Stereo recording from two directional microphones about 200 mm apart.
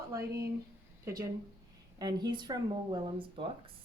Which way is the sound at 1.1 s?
15° right (ahead or behind).